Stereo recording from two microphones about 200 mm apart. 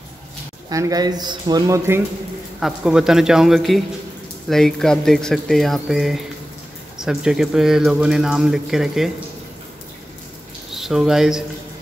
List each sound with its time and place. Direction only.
0.7 s speech: 15° right (ahead or behind)
2.6 s speech: 5° right (ahead or behind)
10.7 s speech: centre (ahead or behind)